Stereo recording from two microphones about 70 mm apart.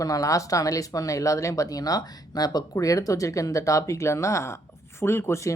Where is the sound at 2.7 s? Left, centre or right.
Left.